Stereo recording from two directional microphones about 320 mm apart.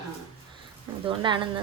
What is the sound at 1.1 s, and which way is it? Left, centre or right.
Speech, centre.